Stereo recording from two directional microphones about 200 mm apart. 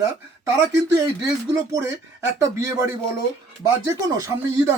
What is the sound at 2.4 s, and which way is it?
Speech, 15° right (ahead or behind).